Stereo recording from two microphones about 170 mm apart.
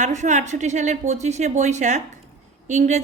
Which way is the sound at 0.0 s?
45° right (ahead or behind).